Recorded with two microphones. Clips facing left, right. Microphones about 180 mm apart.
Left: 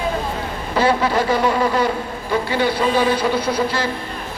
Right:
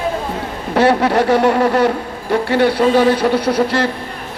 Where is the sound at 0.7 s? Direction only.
70° right (ahead or behind).